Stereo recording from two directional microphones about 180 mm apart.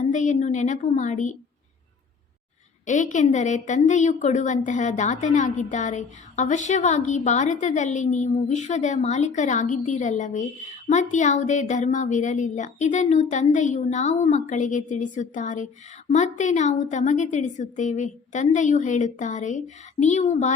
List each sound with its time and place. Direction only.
0.0 s a woman's voice: 40° left (ahead or behind)
2.8 s a woman's voice: 45° left (ahead or behind)